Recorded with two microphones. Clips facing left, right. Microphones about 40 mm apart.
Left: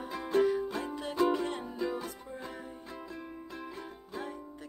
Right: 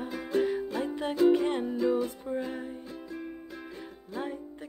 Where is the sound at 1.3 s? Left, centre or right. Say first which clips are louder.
Right 7 dB; right.